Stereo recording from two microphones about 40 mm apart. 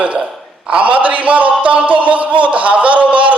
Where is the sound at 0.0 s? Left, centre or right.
Right.